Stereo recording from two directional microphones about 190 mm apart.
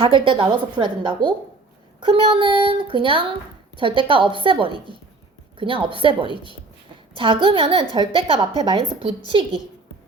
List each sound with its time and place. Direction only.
0.0 s a woman's voice: 25° right (ahead or behind)